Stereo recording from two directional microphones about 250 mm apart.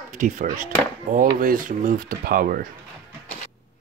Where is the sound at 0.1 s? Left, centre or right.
Right.